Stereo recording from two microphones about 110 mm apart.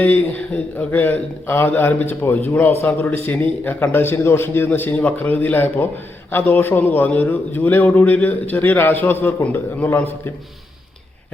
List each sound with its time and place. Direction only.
0.0 s a man's voice: 15° left (ahead or behind)